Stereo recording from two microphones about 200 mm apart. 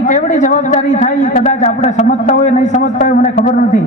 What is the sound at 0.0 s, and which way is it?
A man's voice, 40° left (ahead or behind).